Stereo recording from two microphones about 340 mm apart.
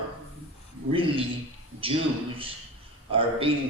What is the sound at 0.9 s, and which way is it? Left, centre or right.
Speech, centre.